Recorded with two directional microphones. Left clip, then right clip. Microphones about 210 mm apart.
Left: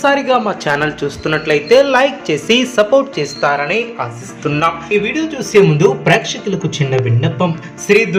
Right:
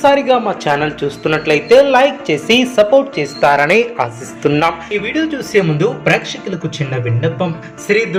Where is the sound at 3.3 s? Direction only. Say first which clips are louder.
Right 5 dB; 20° right (ahead or behind).